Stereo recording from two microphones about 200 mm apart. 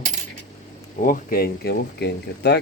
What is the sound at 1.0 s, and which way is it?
A man's voice, 45° left (ahead or behind).